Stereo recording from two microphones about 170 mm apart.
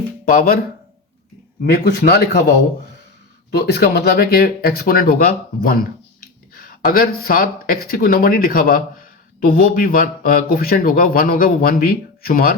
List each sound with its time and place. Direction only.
0.3 s a man's voice: 55° left (ahead or behind)
1.7 s a man's voice: 75° left (ahead or behind)
3.5 s a man's voice: 75° left (ahead or behind)